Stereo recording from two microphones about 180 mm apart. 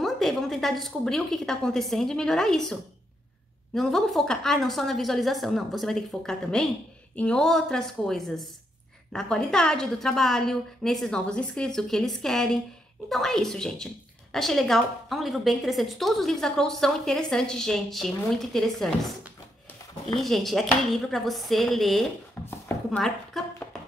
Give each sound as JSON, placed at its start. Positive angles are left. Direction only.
{"t": 0.0, "sound": "a woman's voice", "side_deg": 0}